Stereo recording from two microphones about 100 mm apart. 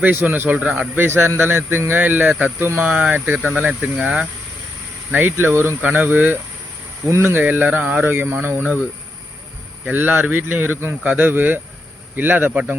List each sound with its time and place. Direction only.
0.0 s speech: 20° right (ahead or behind)
9.8 s speech: 15° right (ahead or behind)